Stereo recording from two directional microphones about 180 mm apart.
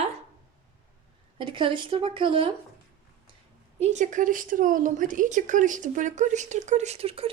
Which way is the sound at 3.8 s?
40° right (ahead or behind).